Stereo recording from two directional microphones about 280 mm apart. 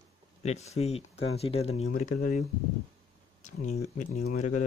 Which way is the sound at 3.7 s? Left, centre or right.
Left.